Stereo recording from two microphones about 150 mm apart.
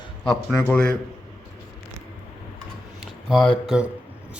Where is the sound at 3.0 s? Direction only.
Centre (ahead or behind).